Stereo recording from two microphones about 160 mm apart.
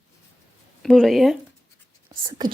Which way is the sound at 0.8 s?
Centre (ahead or behind).